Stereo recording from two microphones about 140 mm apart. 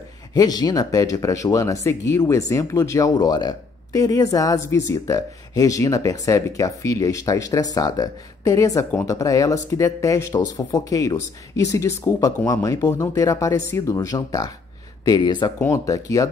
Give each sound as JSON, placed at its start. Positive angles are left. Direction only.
{"t": 0.3, "sound": "speech", "side_deg": 25}